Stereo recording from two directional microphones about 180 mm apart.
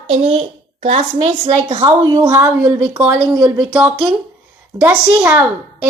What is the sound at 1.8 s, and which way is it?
A woman's voice, 20° right (ahead or behind).